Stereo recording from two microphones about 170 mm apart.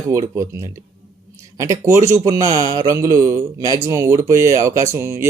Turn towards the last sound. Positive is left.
turn(degrees=-15)  # may be behind; listen again after turning